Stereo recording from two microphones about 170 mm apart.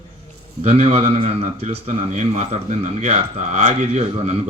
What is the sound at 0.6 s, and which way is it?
A man's voice, 35° right (ahead or behind).